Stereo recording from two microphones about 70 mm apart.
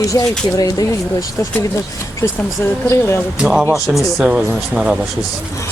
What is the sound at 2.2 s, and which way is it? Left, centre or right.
Speech, left.